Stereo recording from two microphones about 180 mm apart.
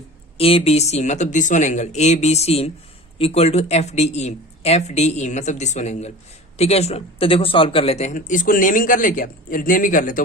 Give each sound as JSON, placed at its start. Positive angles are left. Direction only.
{"t": 0.3, "sound": "speech", "side_deg": 30}